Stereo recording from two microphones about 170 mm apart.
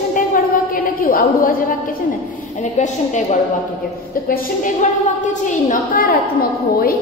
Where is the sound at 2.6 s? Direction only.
45° left (ahead or behind).